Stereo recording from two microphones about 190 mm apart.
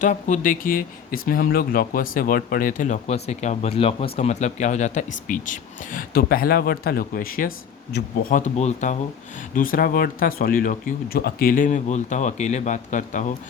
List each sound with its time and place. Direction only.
0.0 s speech: 40° left (ahead or behind)
9.6 s speech: 50° left (ahead or behind)